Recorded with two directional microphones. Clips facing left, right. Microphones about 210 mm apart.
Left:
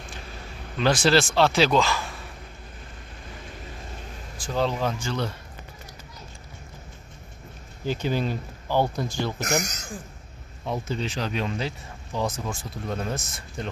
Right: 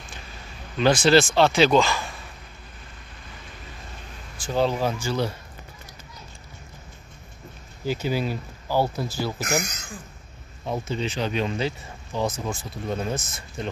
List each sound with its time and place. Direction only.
0.7 s speech: centre (ahead or behind)
4.4 s speech: 5° right (ahead or behind)
7.8 s speech: 10° right (ahead or behind)
9.4 s speech: 45° left (ahead or behind)
10.9 s speech: centre (ahead or behind)